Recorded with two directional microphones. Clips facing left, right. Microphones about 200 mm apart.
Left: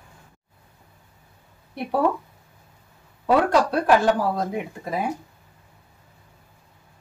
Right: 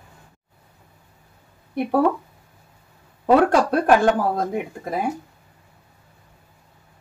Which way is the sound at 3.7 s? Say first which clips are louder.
Right 2 dB; 50° right (ahead or behind).